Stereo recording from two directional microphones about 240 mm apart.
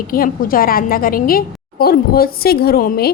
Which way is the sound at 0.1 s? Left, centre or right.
Left.